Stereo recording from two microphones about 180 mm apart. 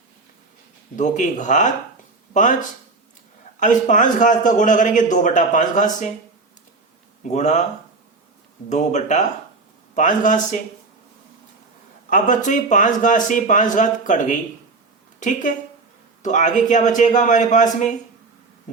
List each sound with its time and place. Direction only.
0.9 s a man's voice: 45° left (ahead or behind)
7.3 s speech: 40° left (ahead or behind)
8.7 s a man's voice: 40° left (ahead or behind)
12.1 s a man's voice: 45° left (ahead or behind)